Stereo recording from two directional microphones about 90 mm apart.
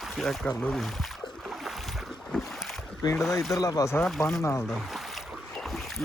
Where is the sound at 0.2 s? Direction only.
5° left (ahead or behind).